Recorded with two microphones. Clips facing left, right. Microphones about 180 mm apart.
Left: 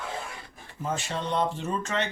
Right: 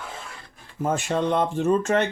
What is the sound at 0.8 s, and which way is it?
Speech, 50° right (ahead or behind).